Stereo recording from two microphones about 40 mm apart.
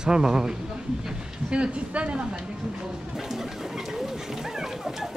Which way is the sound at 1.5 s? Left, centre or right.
Right.